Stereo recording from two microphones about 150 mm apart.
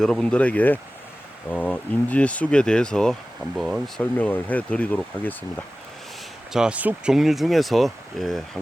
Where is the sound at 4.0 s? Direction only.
10° left (ahead or behind).